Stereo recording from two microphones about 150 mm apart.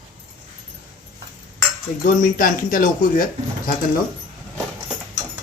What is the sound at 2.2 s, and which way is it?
Speech, 70° left (ahead or behind).